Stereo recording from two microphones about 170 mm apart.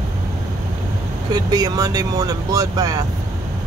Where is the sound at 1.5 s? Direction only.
20° right (ahead or behind).